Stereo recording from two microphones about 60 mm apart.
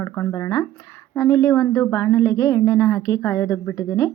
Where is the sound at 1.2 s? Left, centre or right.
Left.